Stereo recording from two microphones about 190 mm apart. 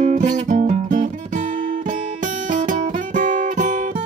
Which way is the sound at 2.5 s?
40° right (ahead or behind).